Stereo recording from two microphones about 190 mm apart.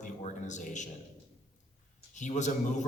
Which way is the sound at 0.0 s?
40° left (ahead or behind).